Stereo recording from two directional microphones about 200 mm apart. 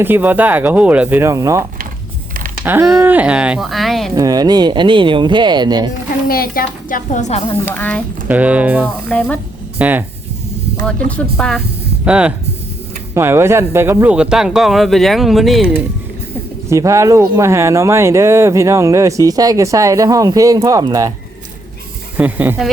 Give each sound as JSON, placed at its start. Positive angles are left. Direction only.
{"t": 0.0, "sound": "speech", "side_deg": -10}
{"t": 2.6, "sound": "speech", "side_deg": -5}
{"t": 4.1, "sound": "speech", "side_deg": -20}
{"t": 6.2, "sound": "a woman's voice", "side_deg": 45}
{"t": 7.6, "sound": "speech", "side_deg": 10}
{"t": 8.3, "sound": "speech", "side_deg": -5}
{"t": 9.1, "sound": "speech", "side_deg": 5}
{"t": 9.7, "sound": "speech", "side_deg": -10}
{"t": 11.2, "sound": "speech", "side_deg": 5}
{"t": 16.6, "sound": "speech", "side_deg": -15}
{"t": 22.2, "sound": "speech", "side_deg": -10}